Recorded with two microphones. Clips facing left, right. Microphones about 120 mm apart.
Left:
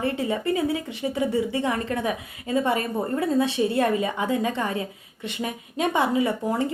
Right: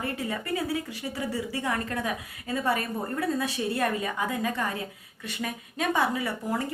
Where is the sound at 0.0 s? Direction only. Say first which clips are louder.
Left 7 dB; 25° left (ahead or behind).